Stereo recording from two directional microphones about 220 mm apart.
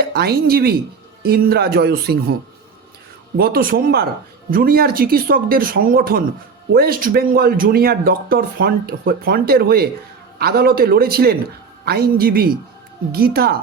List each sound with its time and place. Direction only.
0.0 s speech: 45° right (ahead or behind)
3.3 s speech: 45° right (ahead or behind)